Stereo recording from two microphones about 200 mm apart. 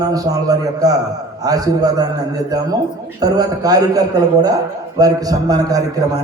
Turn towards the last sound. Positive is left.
turn(degrees=-20)  # may be behind; listen again after turning